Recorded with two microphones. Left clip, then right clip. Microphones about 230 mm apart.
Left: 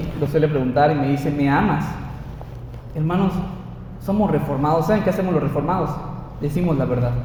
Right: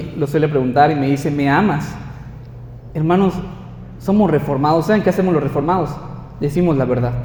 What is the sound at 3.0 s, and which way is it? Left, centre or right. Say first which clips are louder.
Speech: right 7 dB; right.